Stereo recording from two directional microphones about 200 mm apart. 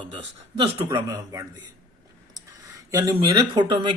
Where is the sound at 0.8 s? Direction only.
15° right (ahead or behind).